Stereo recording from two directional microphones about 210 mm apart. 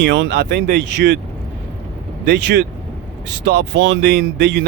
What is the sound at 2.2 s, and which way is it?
Speech, 55° right (ahead or behind).